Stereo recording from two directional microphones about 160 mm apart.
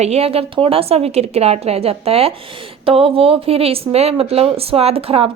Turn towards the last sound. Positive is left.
turn(degrees=-35)  # may be behind; listen again after turning